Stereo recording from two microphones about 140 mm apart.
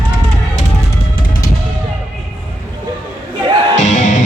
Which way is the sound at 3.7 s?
55° left (ahead or behind).